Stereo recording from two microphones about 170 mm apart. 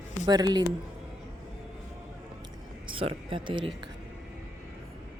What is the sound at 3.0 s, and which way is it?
Speech, 30° right (ahead or behind).